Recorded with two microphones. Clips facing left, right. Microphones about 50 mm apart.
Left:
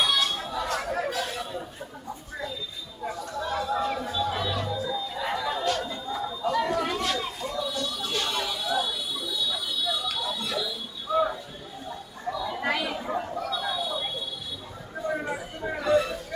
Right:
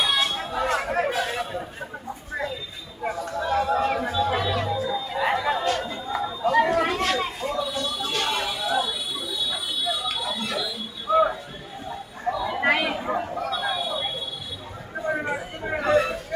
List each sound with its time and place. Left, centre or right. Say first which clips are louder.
0.0 s chatter: right 1 dB; right
0.3 s chatter: right 5 dB; right
1.3 s chatter: right 5 dB; right
3.6 s chatter: right 5 dB; right
4.2 s organ: right 4 dB; right
5.0 s chatter: right 6 dB; right
5.5 s chatter: right 3 dB; right
6.2 s chatter: right 6 dB; right
7.5 s a sound: right 3 dB; right
12.5 s chatter: right 6 dB; right
13.0 s chatter: right 3 dB; right
13.5 s a sound: right 2 dB; right
15.0 s chatter: right 3 dB; right
15.8 s a sound: right 2 dB; right